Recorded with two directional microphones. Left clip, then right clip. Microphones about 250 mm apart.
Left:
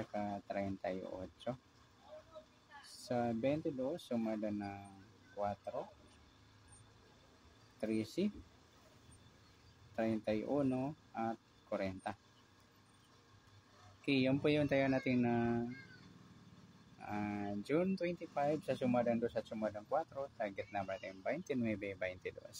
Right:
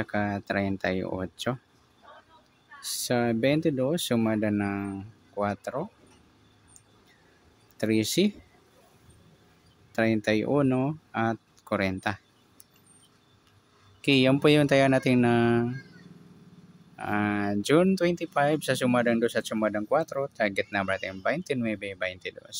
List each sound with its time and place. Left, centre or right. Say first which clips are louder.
0.0 s speech: right 12 dB; right
3.1 s speech: right 11 dB; right
7.8 s speech: right 14 dB; right
9.9 s speech: right 13 dB; right
14.0 s speech: right 13 dB; right
17.0 s speech: right 15 dB; right